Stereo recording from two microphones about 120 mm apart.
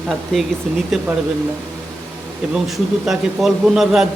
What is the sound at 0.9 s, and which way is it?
Speech, centre (ahead or behind).